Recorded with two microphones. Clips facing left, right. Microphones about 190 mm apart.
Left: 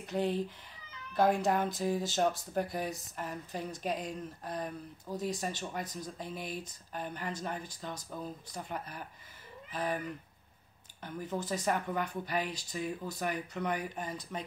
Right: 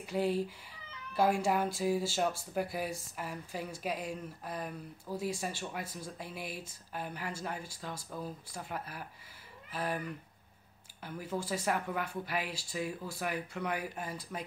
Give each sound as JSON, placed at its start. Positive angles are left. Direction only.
{"t": 0.0, "sound": "speech", "side_deg": -10}
{"t": 11.0, "sound": "speech", "side_deg": -5}